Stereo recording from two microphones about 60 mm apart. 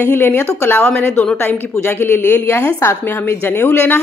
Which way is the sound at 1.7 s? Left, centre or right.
Left.